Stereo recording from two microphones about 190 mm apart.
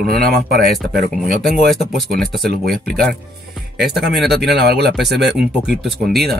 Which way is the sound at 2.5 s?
55° right (ahead or behind).